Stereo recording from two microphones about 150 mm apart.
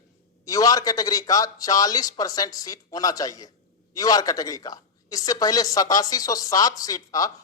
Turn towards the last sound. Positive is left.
turn(degrees=25)  # may be behind; listen again after turning